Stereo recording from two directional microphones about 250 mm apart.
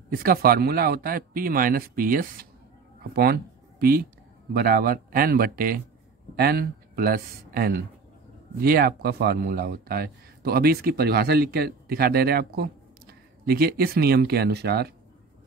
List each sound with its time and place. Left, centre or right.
0.1 s speech: right
4.6 s speech: right